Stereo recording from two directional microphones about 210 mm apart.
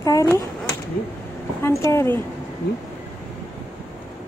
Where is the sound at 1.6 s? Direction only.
10° left (ahead or behind).